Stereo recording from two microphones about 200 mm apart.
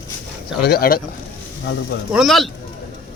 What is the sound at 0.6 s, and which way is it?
Speech, 50° left (ahead or behind).